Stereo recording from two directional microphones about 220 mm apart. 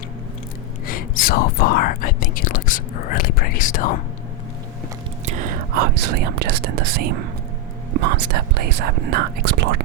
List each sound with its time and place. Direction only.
0.9 s speech: 40° left (ahead or behind)
5.2 s speech: 40° right (ahead or behind)
8.2 s speech: 45° right (ahead or behind)